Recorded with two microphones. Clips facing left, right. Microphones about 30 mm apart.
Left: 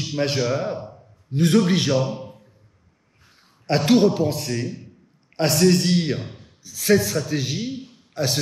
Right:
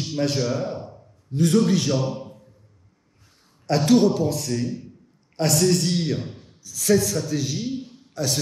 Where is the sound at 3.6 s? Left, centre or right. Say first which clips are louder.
Left 1 dB; left.